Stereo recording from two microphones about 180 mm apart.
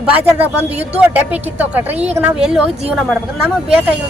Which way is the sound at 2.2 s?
5° right (ahead or behind).